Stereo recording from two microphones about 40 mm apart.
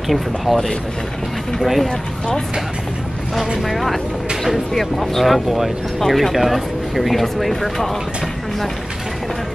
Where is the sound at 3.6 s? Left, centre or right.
Centre.